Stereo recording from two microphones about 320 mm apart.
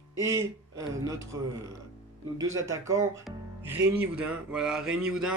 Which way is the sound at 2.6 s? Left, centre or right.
Centre.